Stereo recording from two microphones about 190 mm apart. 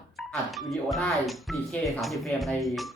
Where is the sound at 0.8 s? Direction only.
Centre (ahead or behind).